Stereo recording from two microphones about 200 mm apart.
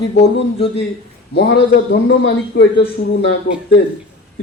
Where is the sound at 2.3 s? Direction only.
55° left (ahead or behind).